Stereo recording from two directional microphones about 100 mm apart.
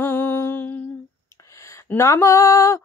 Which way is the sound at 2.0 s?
30° left (ahead or behind).